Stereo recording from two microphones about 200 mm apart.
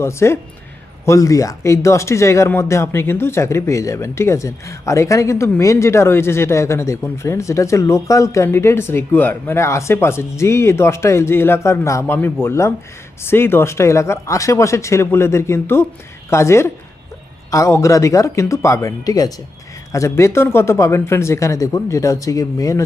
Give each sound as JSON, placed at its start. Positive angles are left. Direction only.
{"t": 0.0, "sound": "speech", "side_deg": 15}